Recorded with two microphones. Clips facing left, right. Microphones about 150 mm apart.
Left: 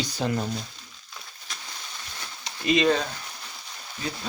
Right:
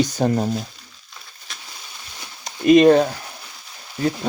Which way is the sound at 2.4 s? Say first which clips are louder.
Right 10 dB; 50° right (ahead or behind).